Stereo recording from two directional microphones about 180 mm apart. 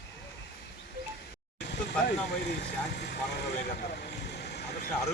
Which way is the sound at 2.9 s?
65° left (ahead or behind).